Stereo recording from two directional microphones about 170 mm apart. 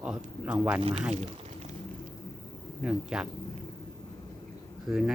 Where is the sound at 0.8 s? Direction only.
30° right (ahead or behind).